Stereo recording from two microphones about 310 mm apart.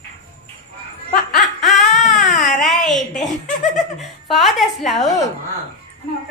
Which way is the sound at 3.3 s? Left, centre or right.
Left.